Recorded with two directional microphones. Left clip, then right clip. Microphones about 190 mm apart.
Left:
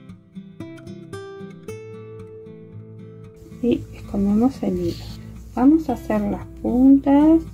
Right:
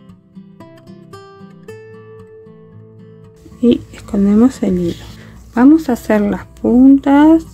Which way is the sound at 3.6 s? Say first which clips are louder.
Right 8 dB; 40° right (ahead or behind).